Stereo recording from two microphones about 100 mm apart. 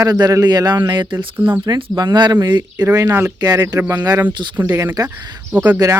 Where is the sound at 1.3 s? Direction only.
20° right (ahead or behind).